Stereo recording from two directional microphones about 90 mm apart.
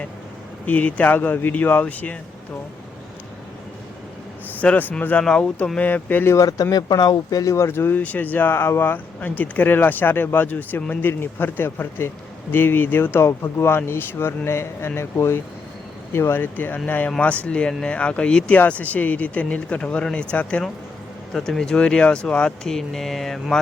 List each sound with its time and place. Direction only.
0.6 s speech: 15° left (ahead or behind)
4.6 s speech: 20° left (ahead or behind)
6.3 s speech: 40° left (ahead or behind); by 23.6 s 5° left (ahead or behind)